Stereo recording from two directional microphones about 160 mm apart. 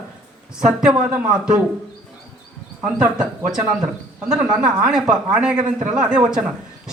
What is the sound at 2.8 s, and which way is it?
Speech, 5° right (ahead or behind).